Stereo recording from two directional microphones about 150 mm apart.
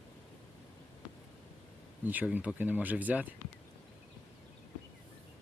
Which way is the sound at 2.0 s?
10° right (ahead or behind).